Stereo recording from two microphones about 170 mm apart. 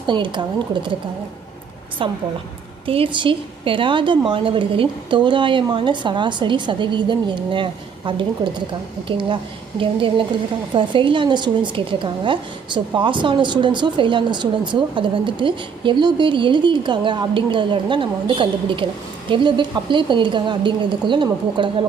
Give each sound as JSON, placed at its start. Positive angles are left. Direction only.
{"t": 0.0, "sound": "a woman's voice", "side_deg": -30}
{"t": 2.0, "sound": "a woman's voice", "side_deg": -30}